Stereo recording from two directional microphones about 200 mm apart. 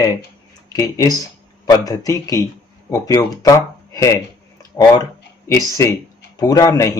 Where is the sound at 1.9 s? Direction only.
20° left (ahead or behind).